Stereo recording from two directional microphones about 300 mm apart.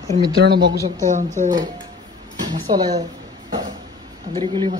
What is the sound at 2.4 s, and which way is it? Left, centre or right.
Speech, centre.